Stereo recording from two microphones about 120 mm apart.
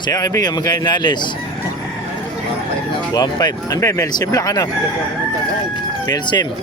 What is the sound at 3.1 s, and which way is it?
Speech, 35° left (ahead or behind).